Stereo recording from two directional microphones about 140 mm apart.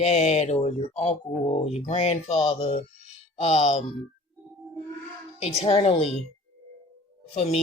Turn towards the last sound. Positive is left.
turn(degrees=50)  # may be behind; listen again after turning